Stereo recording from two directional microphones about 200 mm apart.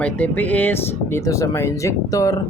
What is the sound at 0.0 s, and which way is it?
Speech, 10° left (ahead or behind).